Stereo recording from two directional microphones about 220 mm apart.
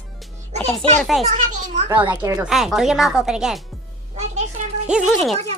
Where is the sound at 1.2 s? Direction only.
35° right (ahead or behind).